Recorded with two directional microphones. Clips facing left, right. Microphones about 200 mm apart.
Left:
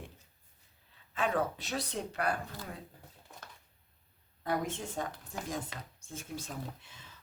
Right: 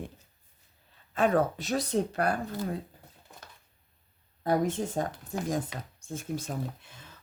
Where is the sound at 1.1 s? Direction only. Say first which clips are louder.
Right 7 dB; 45° right (ahead or behind).